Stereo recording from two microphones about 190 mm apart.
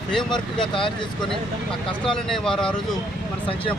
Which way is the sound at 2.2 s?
5° left (ahead or behind).